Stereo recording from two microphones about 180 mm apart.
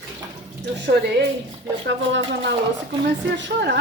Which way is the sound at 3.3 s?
70° right (ahead or behind).